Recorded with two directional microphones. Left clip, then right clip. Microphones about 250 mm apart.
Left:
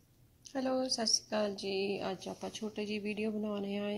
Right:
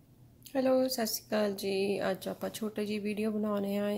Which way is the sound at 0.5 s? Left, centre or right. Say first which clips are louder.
Right 6 dB; centre.